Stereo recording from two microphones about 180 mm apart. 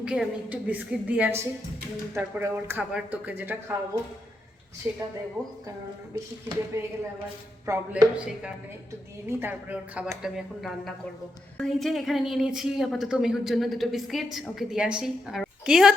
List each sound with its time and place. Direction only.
0.0 s speech: 5° right (ahead or behind)
4.9 s speech: 15° right (ahead or behind)
6.7 s a woman's voice: 15° right (ahead or behind)